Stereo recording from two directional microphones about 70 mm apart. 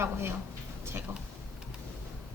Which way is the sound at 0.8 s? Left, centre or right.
Right.